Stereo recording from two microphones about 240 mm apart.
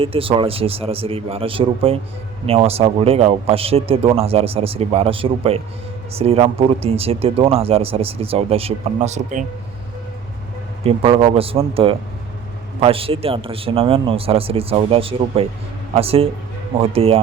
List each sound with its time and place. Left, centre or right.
0.0 s speech: right
10.8 s speech: right